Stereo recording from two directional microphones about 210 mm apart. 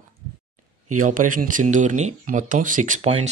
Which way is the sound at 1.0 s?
40° right (ahead or behind).